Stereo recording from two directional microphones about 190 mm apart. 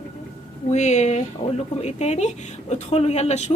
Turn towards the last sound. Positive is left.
turn(degrees=35)  # may be behind; listen again after turning